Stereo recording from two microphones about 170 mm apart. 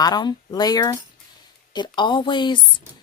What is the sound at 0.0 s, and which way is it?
Speech, 25° left (ahead or behind).